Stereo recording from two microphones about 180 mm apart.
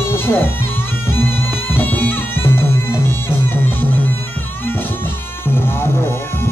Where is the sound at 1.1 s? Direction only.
10° left (ahead or behind).